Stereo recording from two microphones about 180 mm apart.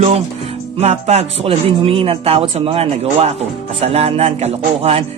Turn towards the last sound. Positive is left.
turn(degrees=-35)  # may be behind; listen again after turning